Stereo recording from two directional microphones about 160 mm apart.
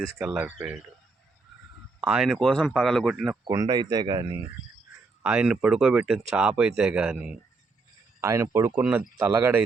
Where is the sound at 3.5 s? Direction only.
25° right (ahead or behind).